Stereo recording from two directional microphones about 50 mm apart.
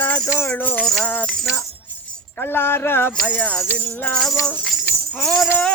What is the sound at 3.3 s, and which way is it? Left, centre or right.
Music, left.